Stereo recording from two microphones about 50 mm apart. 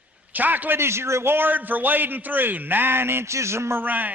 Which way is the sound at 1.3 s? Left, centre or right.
Right.